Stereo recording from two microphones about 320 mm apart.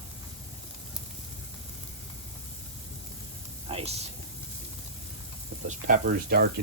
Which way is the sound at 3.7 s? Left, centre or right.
Centre.